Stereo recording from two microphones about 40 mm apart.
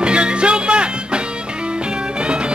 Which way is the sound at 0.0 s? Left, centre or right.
Right.